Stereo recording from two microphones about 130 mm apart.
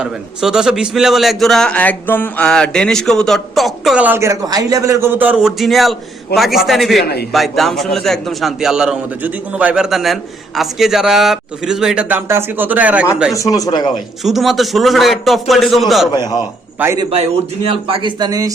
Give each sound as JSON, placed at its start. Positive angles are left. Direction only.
{"t": 0.0, "sound": "a man's voice", "side_deg": -5}
{"t": 4.0, "sound": "a man's voice", "side_deg": -20}
{"t": 13.3, "sound": "speech", "side_deg": 25}
{"t": 14.3, "sound": "a man's voice", "side_deg": 0}
{"t": 16.1, "sound": "a man's voice", "side_deg": 30}
{"t": 17.1, "sound": "speech", "side_deg": -50}